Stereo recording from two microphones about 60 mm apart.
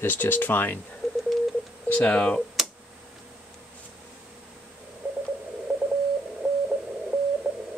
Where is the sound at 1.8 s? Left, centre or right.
Left.